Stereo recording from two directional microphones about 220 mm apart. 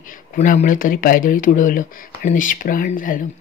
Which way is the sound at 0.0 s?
35° left (ahead or behind).